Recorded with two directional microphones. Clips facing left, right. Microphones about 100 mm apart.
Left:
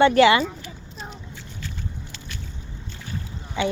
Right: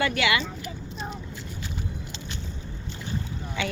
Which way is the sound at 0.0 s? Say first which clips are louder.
Left 10 dB; 35° left (ahead or behind).